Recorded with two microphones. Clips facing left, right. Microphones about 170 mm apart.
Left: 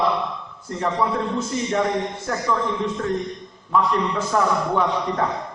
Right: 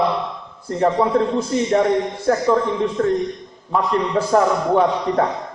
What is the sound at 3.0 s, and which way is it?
A man's voice, 45° right (ahead or behind).